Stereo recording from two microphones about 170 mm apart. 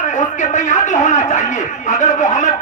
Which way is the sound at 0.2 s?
45° left (ahead or behind).